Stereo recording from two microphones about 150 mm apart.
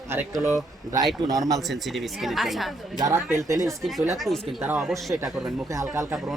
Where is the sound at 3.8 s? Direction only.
Centre (ahead or behind).